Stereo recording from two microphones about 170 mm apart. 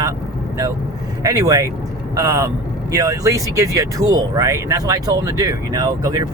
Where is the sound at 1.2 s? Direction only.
20° right (ahead or behind).